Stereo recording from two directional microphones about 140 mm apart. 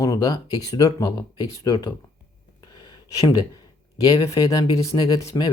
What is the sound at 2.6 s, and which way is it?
Gasp, 30° left (ahead or behind).